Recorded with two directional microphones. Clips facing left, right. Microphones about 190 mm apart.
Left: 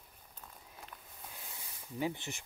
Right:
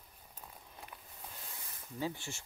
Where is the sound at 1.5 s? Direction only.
15° left (ahead or behind).